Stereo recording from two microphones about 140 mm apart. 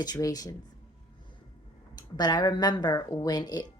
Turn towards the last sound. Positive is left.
turn(degrees=30)  # may be behind; listen again after turning